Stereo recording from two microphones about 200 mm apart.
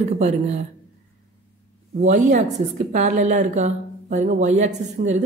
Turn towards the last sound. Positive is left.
turn(degrees=-35)  # may be behind; listen again after turning